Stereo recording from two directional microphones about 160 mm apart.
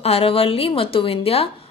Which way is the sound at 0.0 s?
35° left (ahead or behind).